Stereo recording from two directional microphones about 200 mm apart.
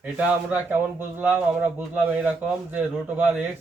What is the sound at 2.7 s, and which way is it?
Speech, 5° right (ahead or behind).